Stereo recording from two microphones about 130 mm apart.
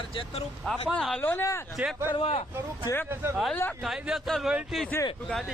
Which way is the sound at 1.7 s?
Centre (ahead or behind).